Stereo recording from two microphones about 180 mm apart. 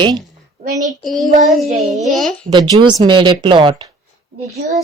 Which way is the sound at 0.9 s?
Centre (ahead or behind).